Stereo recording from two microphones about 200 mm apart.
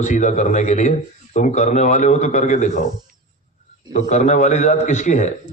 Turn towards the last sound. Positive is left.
turn(degrees=35)  # may be behind; listen again after turning